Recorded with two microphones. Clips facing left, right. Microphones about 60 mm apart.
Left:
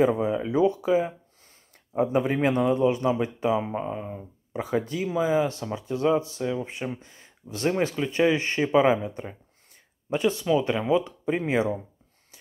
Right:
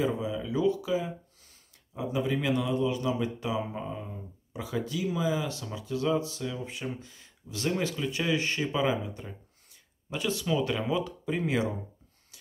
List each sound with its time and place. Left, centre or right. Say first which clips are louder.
0.0 s a man's voice: left 7 dB; left